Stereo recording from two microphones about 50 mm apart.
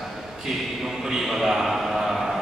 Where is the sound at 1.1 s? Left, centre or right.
Centre.